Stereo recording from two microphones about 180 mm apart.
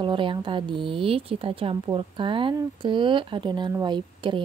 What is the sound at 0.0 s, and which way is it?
Speech, 30° right (ahead or behind).